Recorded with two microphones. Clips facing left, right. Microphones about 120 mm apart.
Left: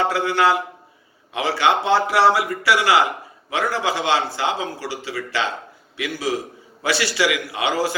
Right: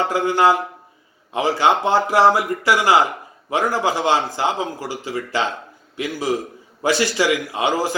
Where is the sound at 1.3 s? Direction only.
15° right (ahead or behind).